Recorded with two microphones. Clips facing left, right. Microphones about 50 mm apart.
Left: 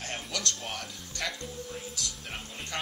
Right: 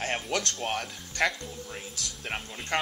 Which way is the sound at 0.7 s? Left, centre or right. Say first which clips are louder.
Right 6 dB; right.